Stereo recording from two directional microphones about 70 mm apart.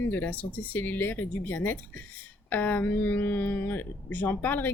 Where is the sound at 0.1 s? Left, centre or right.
Left.